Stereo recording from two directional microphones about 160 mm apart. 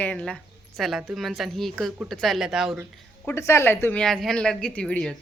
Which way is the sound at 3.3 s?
15° left (ahead or behind).